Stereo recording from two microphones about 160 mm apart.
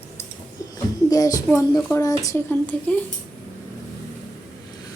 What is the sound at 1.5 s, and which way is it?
A woman's voice, 20° left (ahead or behind).